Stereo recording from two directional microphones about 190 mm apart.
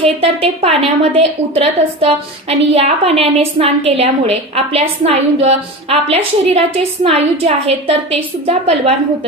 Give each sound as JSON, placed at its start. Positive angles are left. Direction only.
{"t": 0.0, "sound": "a woman's voice", "side_deg": -30}